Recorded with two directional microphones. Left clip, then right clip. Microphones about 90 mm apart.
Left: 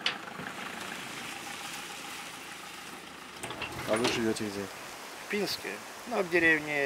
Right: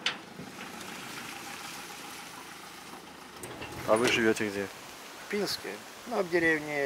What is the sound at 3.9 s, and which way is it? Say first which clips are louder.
Speech: right 4 dB; 30° right (ahead or behind).